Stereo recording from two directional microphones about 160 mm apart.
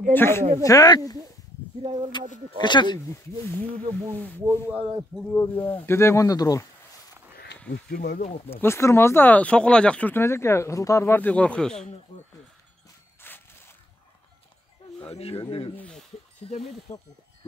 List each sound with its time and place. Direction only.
0.1 s speech: 15° left (ahead or behind)
2.1 s speech: 30° left (ahead or behind)
4.4 s speech: 15° right (ahead or behind)
5.3 s speech: 10° left (ahead or behind)
7.9 s speech: 70° left (ahead or behind)
8.2 s speech: 45° left (ahead or behind)
8.5 s speech: 15° left (ahead or behind)
13.2 s a sound: 15° left (ahead or behind)
15.0 s speech: 40° left (ahead or behind)
15.7 s speech: 5° left (ahead or behind)
16.9 s speech: 20° left (ahead or behind)